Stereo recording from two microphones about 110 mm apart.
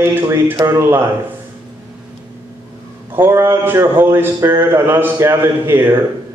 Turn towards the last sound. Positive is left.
turn(degrees=-20)  # may be behind; listen again after turning